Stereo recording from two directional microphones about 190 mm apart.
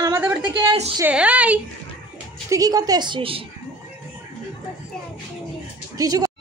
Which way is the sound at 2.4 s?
20° right (ahead or behind).